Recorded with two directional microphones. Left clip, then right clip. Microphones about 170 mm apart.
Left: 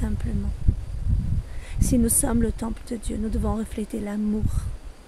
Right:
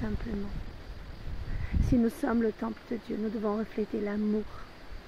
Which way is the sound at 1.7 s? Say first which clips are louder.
Left 5 dB; 50° left (ahead or behind).